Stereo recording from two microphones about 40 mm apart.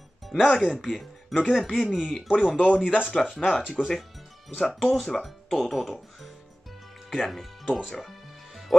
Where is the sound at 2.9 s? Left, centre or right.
Left.